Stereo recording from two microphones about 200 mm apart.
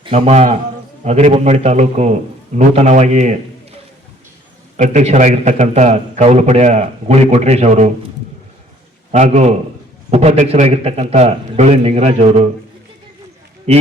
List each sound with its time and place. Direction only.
0.0 s a man's voice: 30° right (ahead or behind)
4.8 s a man's voice: 35° right (ahead or behind)
9.1 s a man's voice: 35° right (ahead or behind)
13.7 s a man's voice: 35° right (ahead or behind)